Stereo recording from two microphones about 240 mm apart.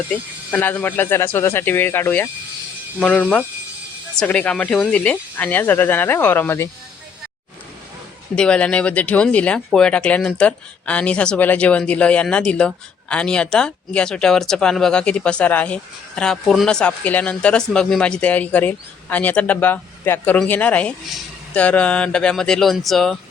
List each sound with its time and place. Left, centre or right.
0.5 s speech: centre
8.4 s speech: centre